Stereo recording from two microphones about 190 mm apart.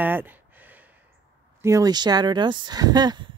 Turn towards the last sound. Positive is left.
turn(degrees=-20)  # may be behind; listen again after turning